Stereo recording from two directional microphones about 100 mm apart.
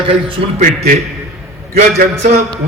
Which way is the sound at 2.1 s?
90° right.